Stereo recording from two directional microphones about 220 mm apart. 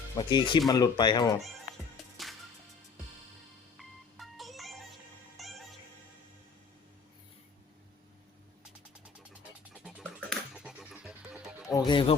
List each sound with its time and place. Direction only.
0.2 s speech: 20° left (ahead or behind)
3.8 s music: centre (ahead or behind)
9.8 s a sound: centre (ahead or behind)
11.7 s speech: 20° left (ahead or behind)